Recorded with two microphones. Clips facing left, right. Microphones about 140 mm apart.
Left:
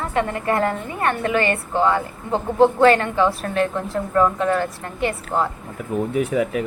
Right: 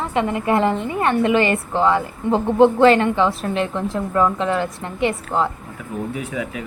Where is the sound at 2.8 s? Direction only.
20° right (ahead or behind).